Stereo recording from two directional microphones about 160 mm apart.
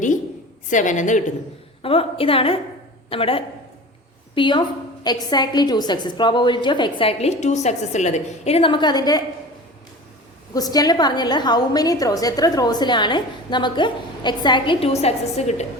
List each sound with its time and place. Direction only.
0.7 s a woman's voice: 50° left (ahead or behind)
1.8 s a woman's voice: 35° left (ahead or behind)
10.5 s a woman's voice: 25° left (ahead or behind); by 15.6 s 45° left (ahead or behind)